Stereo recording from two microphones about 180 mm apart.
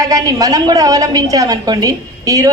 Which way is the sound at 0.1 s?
20° right (ahead or behind).